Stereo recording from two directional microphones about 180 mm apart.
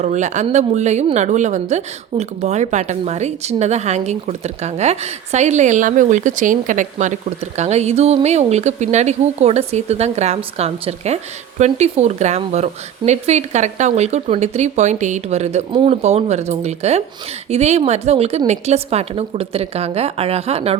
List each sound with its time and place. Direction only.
0.0 s speech: 40° right (ahead or behind)